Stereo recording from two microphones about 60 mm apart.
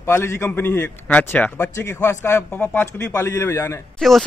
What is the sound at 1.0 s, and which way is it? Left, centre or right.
A man's voice, left.